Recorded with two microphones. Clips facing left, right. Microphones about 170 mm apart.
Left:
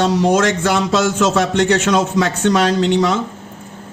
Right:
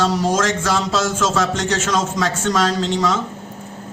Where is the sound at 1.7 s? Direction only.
60° left (ahead or behind).